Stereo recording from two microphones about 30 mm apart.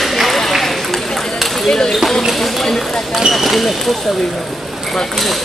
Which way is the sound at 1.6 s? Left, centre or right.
Left.